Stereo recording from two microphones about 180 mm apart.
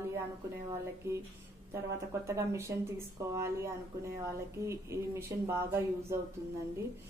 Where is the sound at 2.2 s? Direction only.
15° right (ahead or behind).